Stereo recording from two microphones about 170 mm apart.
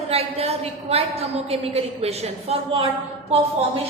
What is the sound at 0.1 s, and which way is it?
A woman's voice, 35° right (ahead or behind).